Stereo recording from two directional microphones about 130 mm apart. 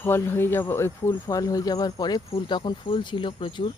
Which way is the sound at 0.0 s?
20° left (ahead or behind).